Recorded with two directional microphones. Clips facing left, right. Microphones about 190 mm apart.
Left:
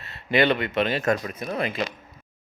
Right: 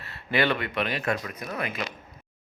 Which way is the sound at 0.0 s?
20° left (ahead or behind).